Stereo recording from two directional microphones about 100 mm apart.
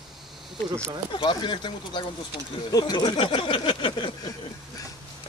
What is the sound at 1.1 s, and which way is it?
Speech, 50° left (ahead or behind).